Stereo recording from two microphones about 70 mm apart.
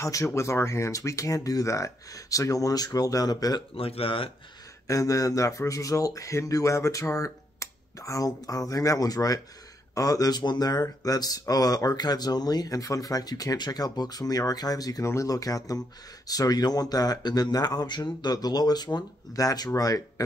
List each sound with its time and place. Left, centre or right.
0.0 s speech: left
4.8 s speech: left